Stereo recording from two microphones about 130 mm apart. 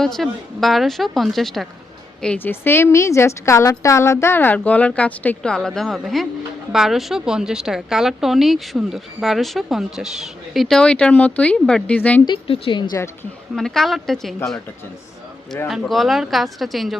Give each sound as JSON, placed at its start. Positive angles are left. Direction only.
{"t": 0.0, "sound": "a woman's voice", "side_deg": 0}
{"t": 2.2, "sound": "a woman's voice", "side_deg": 10}
{"t": 12.2, "sound": "speech", "side_deg": 40}
{"t": 13.6, "sound": "a woman's voice", "side_deg": 5}
{"t": 15.9, "sound": "a woman's voice", "side_deg": 0}